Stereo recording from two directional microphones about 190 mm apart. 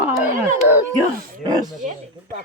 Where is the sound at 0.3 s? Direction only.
45° right (ahead or behind).